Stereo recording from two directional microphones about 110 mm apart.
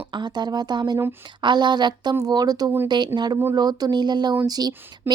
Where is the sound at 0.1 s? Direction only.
40° right (ahead or behind).